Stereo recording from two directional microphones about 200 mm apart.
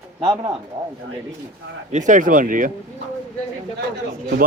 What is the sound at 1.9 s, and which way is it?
Speech, 40° right (ahead or behind).